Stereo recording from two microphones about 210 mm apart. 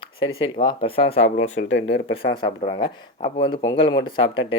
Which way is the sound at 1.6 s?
50° left (ahead or behind).